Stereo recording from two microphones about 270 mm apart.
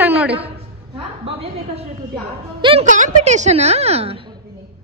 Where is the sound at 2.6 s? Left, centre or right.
Right.